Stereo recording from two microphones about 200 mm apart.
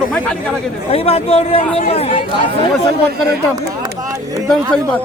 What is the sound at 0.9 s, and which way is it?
Speech, 30° left (ahead or behind).